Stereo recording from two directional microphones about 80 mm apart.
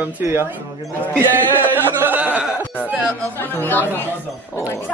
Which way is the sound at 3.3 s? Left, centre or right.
Left.